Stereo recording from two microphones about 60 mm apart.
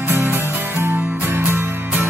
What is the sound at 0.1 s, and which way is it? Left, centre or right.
Music, right.